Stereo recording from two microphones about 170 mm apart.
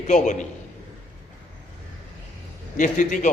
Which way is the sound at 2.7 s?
50° left (ahead or behind).